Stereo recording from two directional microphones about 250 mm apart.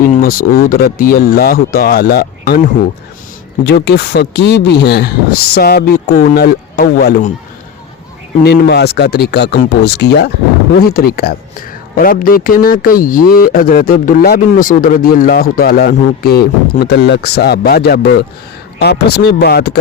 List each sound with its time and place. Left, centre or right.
0.0 s a man's voice: left
3.6 s a man's voice: left
8.4 s a man's voice: left